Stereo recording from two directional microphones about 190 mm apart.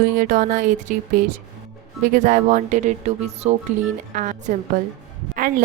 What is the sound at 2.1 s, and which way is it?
A woman's voice, 40° right (ahead or behind).